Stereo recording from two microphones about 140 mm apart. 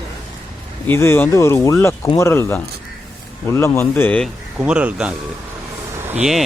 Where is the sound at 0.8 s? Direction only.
15° left (ahead or behind).